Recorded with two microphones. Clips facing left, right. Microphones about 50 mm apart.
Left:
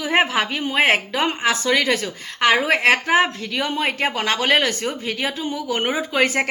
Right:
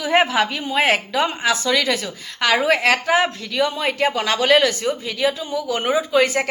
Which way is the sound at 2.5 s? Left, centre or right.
Left.